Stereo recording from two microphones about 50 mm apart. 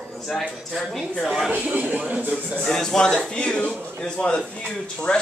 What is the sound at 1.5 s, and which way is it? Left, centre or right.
Speech, right.